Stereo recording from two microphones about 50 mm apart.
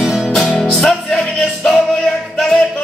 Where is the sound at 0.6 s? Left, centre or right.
Centre.